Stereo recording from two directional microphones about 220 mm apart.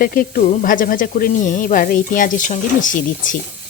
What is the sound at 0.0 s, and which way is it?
Speech, 40° left (ahead or behind).